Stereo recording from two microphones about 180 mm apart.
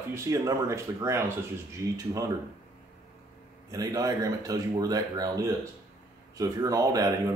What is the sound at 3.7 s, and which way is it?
Speech, 20° right (ahead or behind).